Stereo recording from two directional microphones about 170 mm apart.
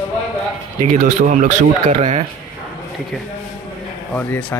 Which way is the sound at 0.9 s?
45° right (ahead or behind).